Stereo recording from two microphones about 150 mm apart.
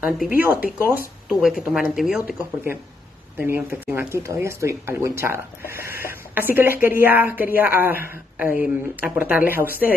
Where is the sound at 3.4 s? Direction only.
15° right (ahead or behind).